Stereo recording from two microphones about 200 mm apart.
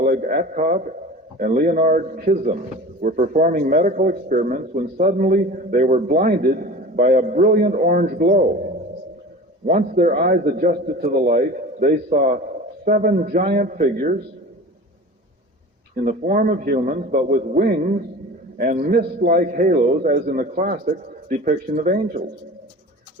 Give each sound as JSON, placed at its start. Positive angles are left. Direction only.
{"t": 0.0, "sound": "a man's voice", "side_deg": -45}
{"t": 9.6, "sound": "a man's voice", "side_deg": -40}
{"t": 16.0, "sound": "a man's voice", "side_deg": -40}